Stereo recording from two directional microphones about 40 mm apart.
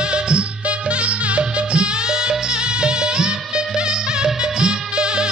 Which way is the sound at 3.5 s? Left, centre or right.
Centre.